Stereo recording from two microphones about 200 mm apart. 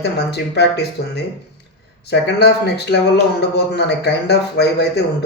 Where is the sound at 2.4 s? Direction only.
55° left (ahead or behind).